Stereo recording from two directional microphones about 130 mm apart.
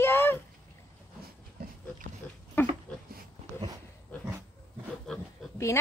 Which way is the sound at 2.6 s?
15° left (ahead or behind).